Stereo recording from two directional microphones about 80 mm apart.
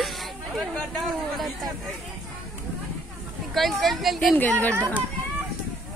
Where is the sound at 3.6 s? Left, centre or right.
Centre.